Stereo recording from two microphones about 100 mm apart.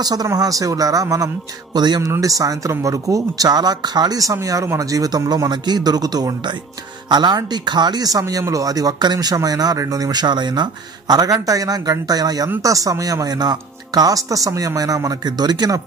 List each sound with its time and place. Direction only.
0.0 s a man's voice: 40° right (ahead or behind)